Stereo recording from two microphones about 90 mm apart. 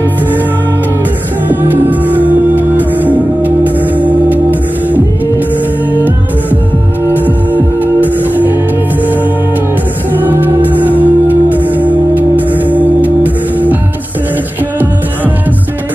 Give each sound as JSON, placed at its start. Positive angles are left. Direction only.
{"t": 1.5, "sound": "music", "side_deg": -20}